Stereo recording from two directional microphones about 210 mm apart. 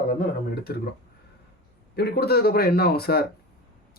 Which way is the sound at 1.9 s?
50° left (ahead or behind).